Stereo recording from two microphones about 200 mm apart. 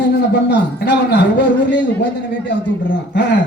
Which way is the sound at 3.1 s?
60° left (ahead or behind).